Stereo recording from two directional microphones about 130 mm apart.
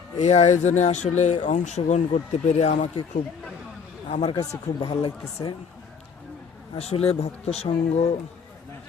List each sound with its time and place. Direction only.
0.2 s speech: 60° left (ahead or behind)
4.1 s speech: 45° left (ahead or behind)
6.7 s speech: 50° left (ahead or behind)